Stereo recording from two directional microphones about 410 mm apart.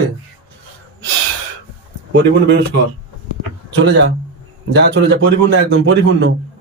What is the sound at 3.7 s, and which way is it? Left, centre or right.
A man's voice, right.